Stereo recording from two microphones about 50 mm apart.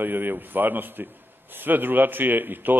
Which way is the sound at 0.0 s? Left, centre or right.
Right.